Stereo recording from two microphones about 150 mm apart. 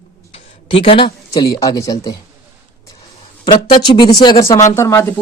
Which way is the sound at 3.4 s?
30° left (ahead or behind).